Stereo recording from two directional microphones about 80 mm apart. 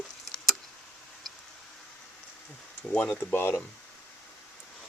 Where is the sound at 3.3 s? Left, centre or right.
Left.